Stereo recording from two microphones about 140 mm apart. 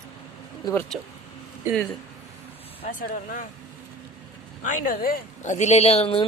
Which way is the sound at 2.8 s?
75° left (ahead or behind).